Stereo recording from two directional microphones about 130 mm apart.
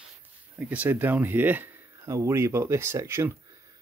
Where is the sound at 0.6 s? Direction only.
10° right (ahead or behind).